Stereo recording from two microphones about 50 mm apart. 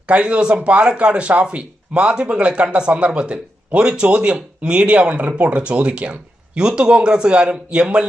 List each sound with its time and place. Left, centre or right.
0.1 s speech: right